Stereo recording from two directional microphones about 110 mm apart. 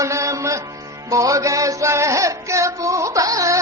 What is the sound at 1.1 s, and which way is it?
Music, 30° right (ahead or behind).